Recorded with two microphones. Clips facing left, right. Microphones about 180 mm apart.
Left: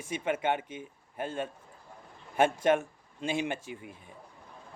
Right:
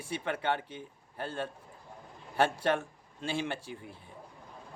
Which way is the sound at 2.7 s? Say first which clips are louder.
Left 4 dB; 15° left (ahead or behind).